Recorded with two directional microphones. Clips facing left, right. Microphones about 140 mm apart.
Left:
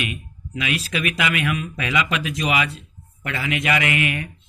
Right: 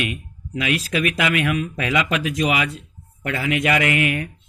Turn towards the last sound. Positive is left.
turn(degrees=-40)  # may be behind; listen again after turning